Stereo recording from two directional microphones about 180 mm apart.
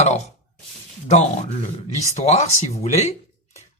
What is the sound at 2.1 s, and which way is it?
Speech, 40° left (ahead or behind).